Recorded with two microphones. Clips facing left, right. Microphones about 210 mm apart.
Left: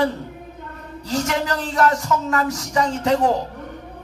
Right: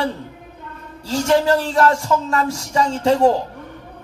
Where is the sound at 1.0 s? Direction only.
30° right (ahead or behind).